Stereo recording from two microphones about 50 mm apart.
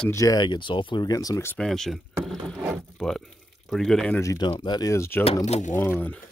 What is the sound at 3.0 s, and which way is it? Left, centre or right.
Speech, centre.